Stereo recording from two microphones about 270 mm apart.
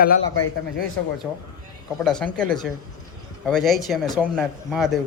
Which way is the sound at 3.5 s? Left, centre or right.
Centre.